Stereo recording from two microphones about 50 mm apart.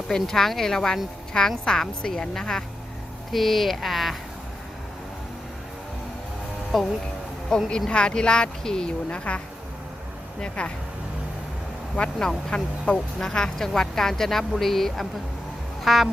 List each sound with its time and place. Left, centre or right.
0.1 s speech: centre
6.7 s speech: centre
7.5 s speech: centre
10.4 s speech: left
11.9 s speech: left; by 15.0 s centre
15.8 s music: centre